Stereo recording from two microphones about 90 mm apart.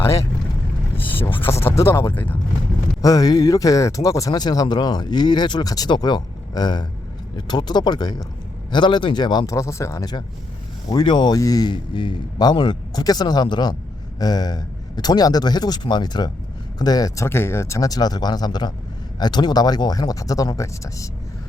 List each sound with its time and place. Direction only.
0.9 s a sound: 20° left (ahead or behind)
3.0 s a man's voice: 45° left (ahead or behind)
9.5 s speech: 35° left (ahead or behind)
10.8 s speech: 55° left (ahead or behind)
11.3 s speech: 45° left (ahead or behind)
17.2 s speech: 25° left (ahead or behind)